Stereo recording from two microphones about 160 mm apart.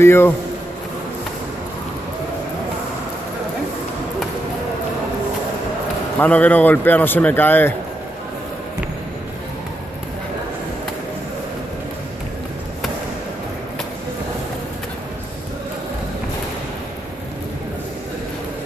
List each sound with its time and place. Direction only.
0.0 s speech: 15° left (ahead or behind)
6.1 s speech: 10° left (ahead or behind)